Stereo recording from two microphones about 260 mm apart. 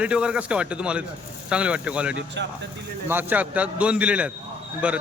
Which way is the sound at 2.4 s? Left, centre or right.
Right.